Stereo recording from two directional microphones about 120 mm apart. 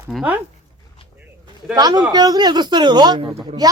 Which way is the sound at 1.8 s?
35° right (ahead or behind).